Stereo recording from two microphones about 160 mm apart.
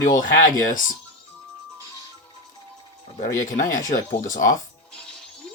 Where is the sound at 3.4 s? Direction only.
60° left (ahead or behind).